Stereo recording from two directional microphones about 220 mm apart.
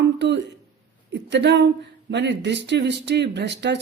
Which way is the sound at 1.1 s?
50° right (ahead or behind).